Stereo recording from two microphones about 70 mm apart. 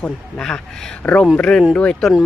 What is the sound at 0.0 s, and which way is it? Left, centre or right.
Speech, centre.